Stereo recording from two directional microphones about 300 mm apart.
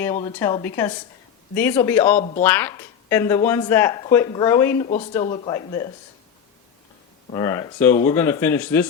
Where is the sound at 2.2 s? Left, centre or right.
Left.